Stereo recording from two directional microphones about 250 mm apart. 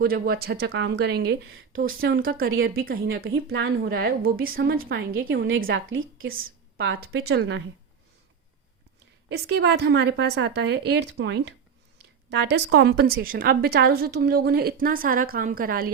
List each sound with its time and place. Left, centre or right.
0.0 s a woman's voice: right
6.3 s a woman's voice: right
9.3 s a woman's voice: right